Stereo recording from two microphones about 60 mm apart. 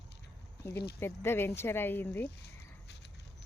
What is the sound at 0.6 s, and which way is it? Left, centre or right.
Speech, left.